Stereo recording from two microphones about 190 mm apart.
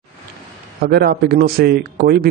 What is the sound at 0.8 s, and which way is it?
Speech, 55° right (ahead or behind).